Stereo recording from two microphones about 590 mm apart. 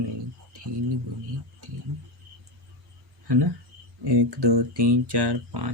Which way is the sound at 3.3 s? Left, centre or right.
Right.